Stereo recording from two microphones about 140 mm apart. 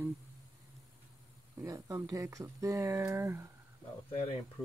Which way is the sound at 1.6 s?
25° right (ahead or behind).